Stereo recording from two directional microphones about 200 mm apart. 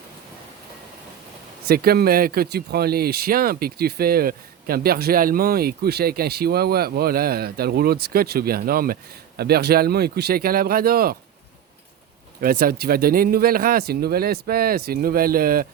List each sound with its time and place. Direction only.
1.6 s speech: 50° right (ahead or behind)
12.4 s speech: 45° right (ahead or behind)